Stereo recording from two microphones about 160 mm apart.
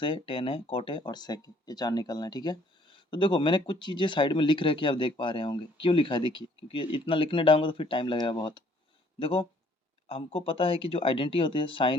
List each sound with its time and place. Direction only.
0.0 s speech: 35° left (ahead or behind)